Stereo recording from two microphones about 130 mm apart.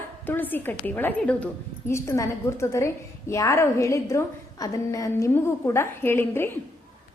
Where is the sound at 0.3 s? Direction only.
15° left (ahead or behind).